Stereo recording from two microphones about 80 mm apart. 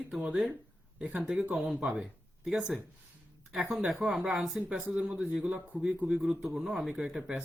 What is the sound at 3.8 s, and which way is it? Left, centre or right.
Speech, centre.